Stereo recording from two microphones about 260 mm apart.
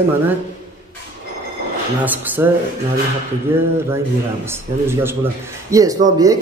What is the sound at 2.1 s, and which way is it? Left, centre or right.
Speech, centre.